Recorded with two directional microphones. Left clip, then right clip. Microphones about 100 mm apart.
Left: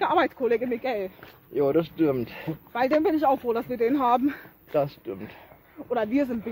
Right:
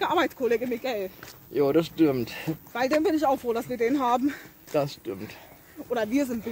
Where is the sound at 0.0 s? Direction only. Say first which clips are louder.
Left 2 dB; 25° left (ahead or behind).